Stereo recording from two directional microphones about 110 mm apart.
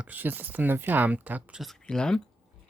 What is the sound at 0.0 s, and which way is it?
Speech, 15° right (ahead or behind).